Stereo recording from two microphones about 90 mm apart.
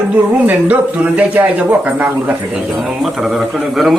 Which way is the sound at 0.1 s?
20° right (ahead or behind).